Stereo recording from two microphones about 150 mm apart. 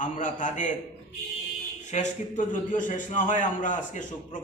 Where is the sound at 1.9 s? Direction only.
55° left (ahead or behind).